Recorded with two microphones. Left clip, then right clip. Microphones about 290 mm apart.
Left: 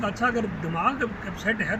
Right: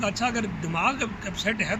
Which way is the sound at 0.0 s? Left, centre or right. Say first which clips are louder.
Left 1 dB; centre.